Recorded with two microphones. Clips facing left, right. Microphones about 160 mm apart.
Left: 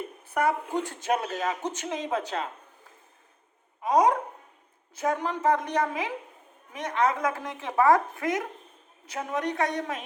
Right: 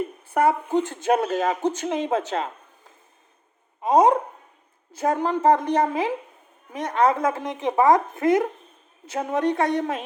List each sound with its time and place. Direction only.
0.4 s a woman's voice: 35° right (ahead or behind)
0.7 s a woman's voice: 25° right (ahead or behind)
3.8 s a woman's voice: 25° right (ahead or behind)